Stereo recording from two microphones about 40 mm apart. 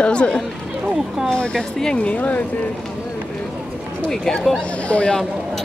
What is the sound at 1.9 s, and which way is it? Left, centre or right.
Speech, left.